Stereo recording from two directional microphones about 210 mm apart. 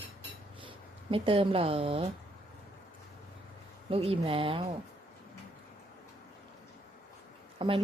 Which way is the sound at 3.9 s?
25° right (ahead or behind).